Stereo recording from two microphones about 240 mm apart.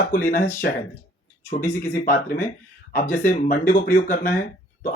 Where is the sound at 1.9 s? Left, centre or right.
Left.